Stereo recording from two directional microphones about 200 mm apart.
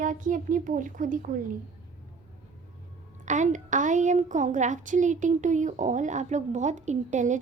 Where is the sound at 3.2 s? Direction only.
40° right (ahead or behind).